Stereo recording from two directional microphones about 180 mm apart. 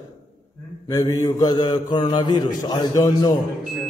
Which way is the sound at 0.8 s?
20° left (ahead or behind).